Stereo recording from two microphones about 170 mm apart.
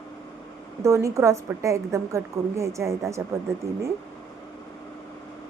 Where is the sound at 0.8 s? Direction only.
15° right (ahead or behind).